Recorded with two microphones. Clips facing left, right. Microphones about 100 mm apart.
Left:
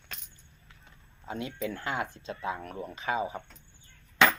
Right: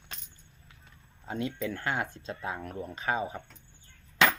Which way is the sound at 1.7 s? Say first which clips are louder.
Right 1 dB; 45° right (ahead or behind).